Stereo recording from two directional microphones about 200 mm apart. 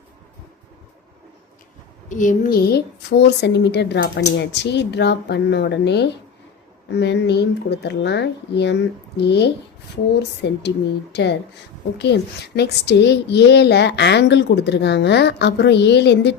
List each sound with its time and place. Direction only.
2.0 s a child's voice: 40° left (ahead or behind); by 16.3 s 60° left (ahead or behind)